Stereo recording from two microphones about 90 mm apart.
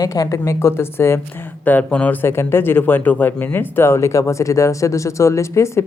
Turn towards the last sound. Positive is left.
turn(degrees=35)  # may be behind; listen again after turning